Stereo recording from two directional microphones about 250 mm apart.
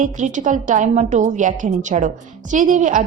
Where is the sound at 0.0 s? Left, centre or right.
Right.